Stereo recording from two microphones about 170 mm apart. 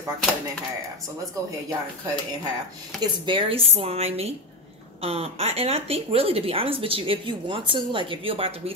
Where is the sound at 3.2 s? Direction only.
30° right (ahead or behind).